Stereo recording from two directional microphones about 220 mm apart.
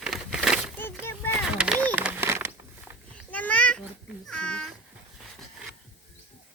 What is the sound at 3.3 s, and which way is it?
Babbling, 5° left (ahead or behind).